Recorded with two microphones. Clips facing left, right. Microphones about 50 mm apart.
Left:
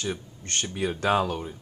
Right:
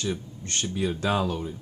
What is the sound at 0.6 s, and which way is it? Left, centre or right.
Speech, centre.